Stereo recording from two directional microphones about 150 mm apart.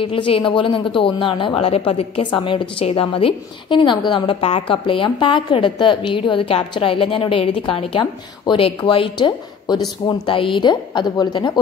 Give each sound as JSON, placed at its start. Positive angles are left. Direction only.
{"t": 0.0, "sound": "a woman's voice", "side_deg": 35}